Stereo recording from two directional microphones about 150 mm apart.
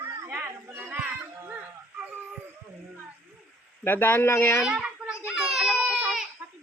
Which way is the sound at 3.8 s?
15° left (ahead or behind).